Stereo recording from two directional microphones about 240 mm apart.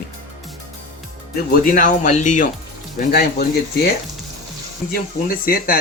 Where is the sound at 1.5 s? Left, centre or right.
Left.